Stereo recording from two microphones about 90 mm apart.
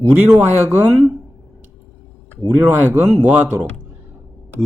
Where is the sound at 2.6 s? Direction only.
25° right (ahead or behind).